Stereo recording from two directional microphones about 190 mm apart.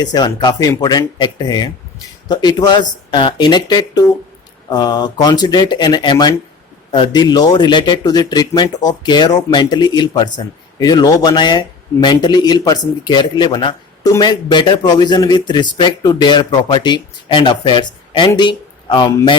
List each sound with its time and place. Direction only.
0.0 s speech: 20° left (ahead or behind)